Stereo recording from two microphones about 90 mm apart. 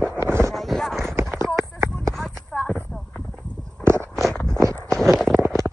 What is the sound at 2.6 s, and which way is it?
Clip-clop, 15° left (ahead or behind).